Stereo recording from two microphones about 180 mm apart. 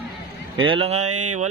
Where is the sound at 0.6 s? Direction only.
30° right (ahead or behind).